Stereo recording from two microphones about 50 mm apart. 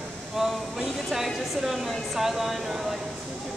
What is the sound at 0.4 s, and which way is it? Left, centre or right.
A woman's voice, centre.